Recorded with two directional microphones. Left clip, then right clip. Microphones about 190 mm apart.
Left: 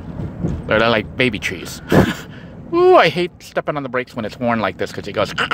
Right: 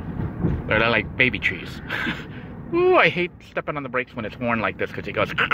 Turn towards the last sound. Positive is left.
turn(degrees=25)  # may be behind; listen again after turning